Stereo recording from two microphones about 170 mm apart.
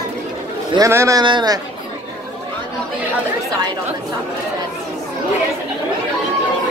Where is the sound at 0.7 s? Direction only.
15° right (ahead or behind).